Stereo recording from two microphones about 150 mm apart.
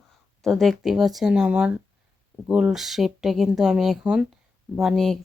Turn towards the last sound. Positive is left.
turn(degrees=0)  # may be behind; listen again after turning